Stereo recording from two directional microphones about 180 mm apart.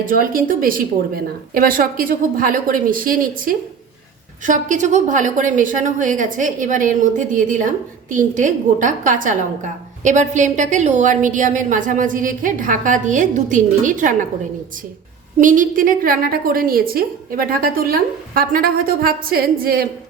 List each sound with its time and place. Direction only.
0.0 s a woman's voice: 50° right (ahead or behind)
15.4 s a woman's voice: 45° right (ahead or behind)